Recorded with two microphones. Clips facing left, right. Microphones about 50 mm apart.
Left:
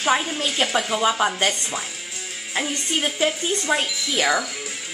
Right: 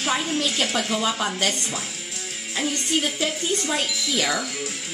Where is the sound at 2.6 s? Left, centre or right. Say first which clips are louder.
Right 1 dB; centre.